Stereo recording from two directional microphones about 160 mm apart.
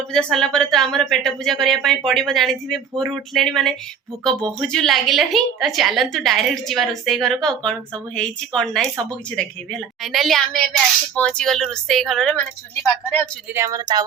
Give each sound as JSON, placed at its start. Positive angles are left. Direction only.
{"t": 0.1, "sound": "a woman's voice", "side_deg": 5}
{"t": 13.5, "sound": "speech", "side_deg": -20}